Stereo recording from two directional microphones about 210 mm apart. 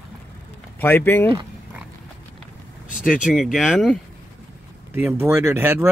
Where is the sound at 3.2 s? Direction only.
Centre (ahead or behind).